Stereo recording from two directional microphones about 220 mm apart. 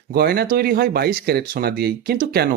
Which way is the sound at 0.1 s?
45° right (ahead or behind).